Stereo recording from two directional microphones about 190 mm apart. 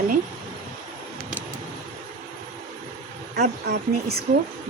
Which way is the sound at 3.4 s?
55° right (ahead or behind).